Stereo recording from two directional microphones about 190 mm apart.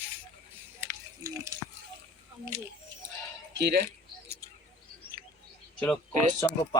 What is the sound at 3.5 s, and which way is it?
Speech, 65° right (ahead or behind).